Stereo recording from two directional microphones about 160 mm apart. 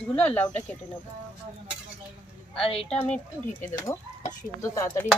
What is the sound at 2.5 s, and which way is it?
Speech, 35° left (ahead or behind).